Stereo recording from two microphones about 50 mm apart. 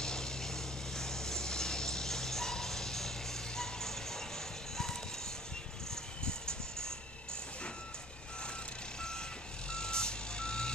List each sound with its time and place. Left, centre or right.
0.0 s a sound: centre
6.2 s music: centre
9.7 s vehicle: centre